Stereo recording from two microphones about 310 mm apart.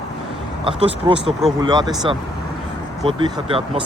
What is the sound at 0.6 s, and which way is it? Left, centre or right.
Speech, centre.